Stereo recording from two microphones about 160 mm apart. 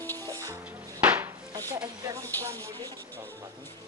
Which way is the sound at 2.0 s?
20° right (ahead or behind).